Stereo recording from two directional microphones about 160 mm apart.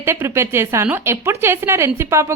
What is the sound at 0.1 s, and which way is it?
A woman's voice, 15° right (ahead or behind).